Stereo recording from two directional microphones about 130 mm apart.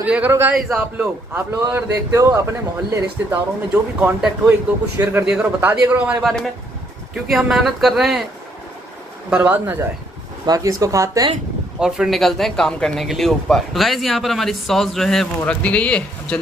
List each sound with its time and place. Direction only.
0.0 s speech: 10° right (ahead or behind)
0.7 s speech: 5° right (ahead or behind)
1.3 s a man's voice: 20° right (ahead or behind)
7.2 s speech: centre (ahead or behind)
9.3 s speech: 15° right (ahead or behind)
10.4 s a man's voice: 30° right (ahead or behind)
11.8 s speech: centre (ahead or behind)